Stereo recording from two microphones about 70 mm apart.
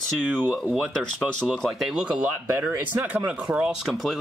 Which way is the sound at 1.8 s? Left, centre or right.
Centre.